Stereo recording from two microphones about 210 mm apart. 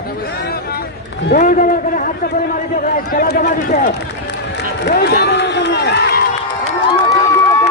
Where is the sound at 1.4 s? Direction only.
40° left (ahead or behind).